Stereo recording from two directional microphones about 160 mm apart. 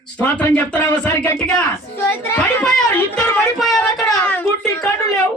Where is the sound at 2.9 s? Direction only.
10° left (ahead or behind).